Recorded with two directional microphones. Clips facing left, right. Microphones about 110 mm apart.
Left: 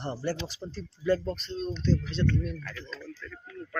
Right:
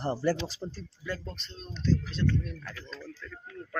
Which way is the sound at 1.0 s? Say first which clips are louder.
Left 11 dB; 45° left (ahead or behind).